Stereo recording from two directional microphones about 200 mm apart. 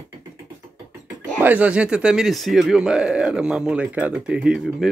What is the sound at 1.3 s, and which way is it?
Speech, 10° right (ahead or behind).